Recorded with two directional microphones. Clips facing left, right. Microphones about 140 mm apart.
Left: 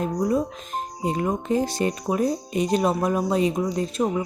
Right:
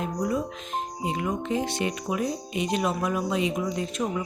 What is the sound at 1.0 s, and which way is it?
Speech, 40° left (ahead or behind).